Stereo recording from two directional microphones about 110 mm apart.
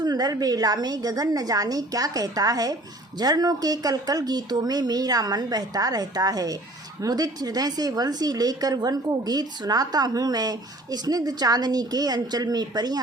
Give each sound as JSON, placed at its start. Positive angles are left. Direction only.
{"t": 0.0, "sound": "a woman's voice", "side_deg": -35}